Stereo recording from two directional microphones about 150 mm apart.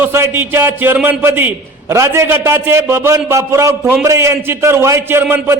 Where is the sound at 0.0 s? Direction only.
15° right (ahead or behind).